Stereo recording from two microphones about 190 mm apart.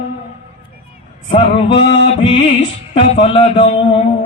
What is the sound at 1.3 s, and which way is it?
Music, 30° left (ahead or behind).